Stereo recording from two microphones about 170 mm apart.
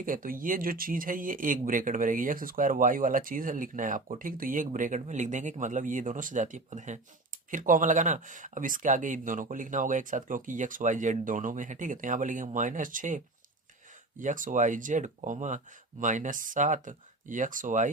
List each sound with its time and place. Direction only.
0.0 s speech: 55° right (ahead or behind)